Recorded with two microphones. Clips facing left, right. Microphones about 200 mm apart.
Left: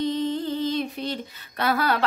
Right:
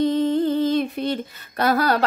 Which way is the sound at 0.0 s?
55° right (ahead or behind).